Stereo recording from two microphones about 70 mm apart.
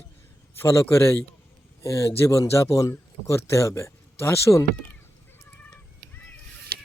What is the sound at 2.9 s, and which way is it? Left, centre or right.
A man's voice, left.